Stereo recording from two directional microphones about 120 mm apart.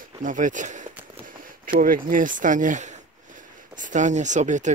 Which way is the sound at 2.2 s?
90° right.